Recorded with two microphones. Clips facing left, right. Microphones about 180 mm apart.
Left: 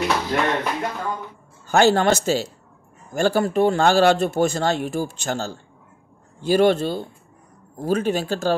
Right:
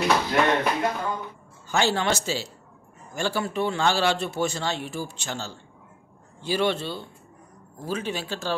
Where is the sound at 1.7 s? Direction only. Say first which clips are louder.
Left 7 dB; 50° left (ahead or behind).